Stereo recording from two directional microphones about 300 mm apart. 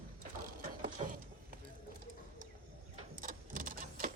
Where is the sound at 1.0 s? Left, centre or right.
Right.